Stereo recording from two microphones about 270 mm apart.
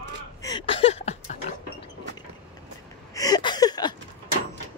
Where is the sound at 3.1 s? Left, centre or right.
Centre.